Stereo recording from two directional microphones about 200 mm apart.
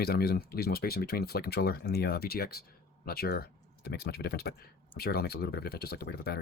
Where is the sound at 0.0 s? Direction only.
50° left (ahead or behind).